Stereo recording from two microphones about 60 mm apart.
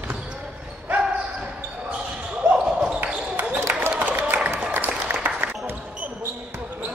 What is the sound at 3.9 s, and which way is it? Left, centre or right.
Applause, right.